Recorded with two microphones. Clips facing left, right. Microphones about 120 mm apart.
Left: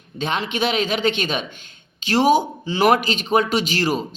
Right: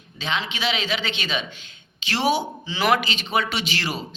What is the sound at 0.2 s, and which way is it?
A man's voice, 50° left (ahead or behind).